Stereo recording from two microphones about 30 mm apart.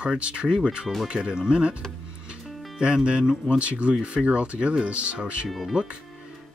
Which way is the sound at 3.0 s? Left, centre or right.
Right.